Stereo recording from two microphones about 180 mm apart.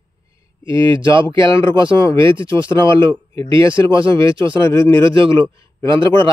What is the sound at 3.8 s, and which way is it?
Speech, 30° right (ahead or behind).